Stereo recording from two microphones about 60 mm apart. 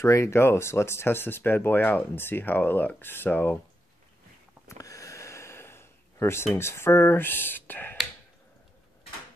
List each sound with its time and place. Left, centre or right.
0.0 s speech: left
0.4 s speech: left
4.6 s gasp: left